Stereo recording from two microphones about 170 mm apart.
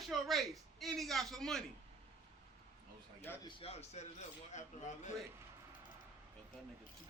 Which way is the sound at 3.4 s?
35° left (ahead or behind).